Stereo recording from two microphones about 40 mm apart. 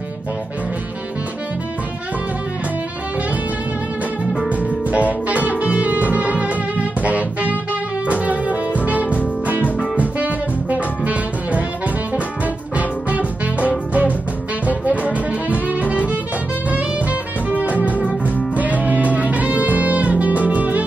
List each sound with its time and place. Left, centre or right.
4.9 s music: right
12.7 s music: right
14.7 s brass instrument: right
17.5 s music: right